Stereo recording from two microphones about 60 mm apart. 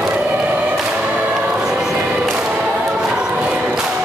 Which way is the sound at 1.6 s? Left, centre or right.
Centre.